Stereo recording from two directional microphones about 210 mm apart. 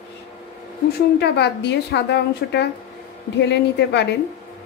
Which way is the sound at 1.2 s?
55° left (ahead or behind).